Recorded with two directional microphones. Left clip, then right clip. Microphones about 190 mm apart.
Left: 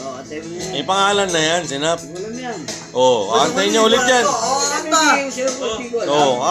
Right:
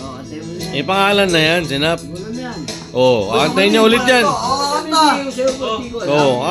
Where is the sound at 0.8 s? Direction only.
30° right (ahead or behind).